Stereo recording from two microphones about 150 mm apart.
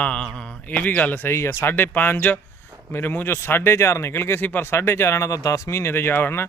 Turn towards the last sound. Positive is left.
turn(degrees=15)  # may be behind; listen again after turning